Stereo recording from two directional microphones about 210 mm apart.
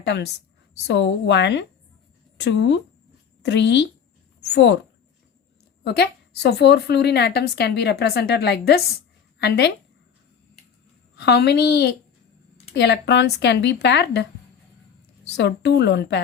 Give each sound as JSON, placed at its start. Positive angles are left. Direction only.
{"t": 0.0, "sound": "a woman's voice", "side_deg": 55}
{"t": 5.8, "sound": "a woman's voice", "side_deg": 50}
{"t": 11.2, "sound": "a woman's voice", "side_deg": 50}
{"t": 15.4, "sound": "speech", "side_deg": 55}